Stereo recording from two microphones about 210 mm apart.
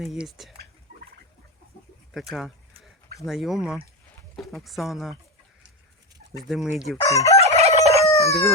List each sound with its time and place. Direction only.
0.0 s speech: centre (ahead or behind)
3.2 s speech: centre (ahead or behind)
6.5 s speech: centre (ahead or behind)
7.0 s fowl: 15° left (ahead or behind)
7.4 s fowl: 30° right (ahead or behind)
8.0 s crowing: 15° left (ahead or behind)